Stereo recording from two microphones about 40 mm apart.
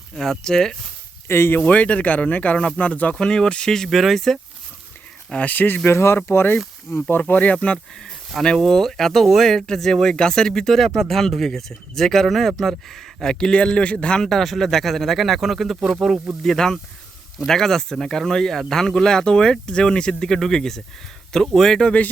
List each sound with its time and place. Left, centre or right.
0.2 s speech: centre
1.3 s speech: left
1.6 s speech: left
3.2 s speech: centre
3.8 s speech: centre
5.4 s speech: left
6.2 s speech: left
6.9 s speech: left
7.3 s speech: left
8.5 s speech: centre
13.6 s speech: left
14.3 s speech: centre
16.4 s speech: centre